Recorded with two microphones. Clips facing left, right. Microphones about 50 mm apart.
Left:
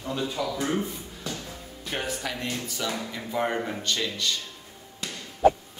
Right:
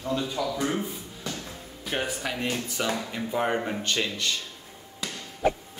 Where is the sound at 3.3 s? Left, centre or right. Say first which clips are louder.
Right 1 dB; centre.